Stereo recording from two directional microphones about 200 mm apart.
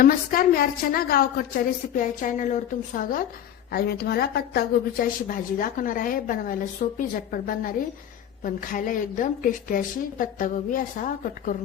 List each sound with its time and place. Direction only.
0.0 s a woman's voice: 45° left (ahead or behind)